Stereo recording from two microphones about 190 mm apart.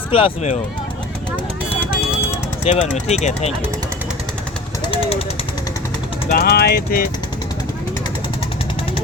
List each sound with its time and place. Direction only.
0.1 s speech: 35° left (ahead or behind)
2.6 s speech: 35° left (ahead or behind)
6.3 s speech: 55° left (ahead or behind)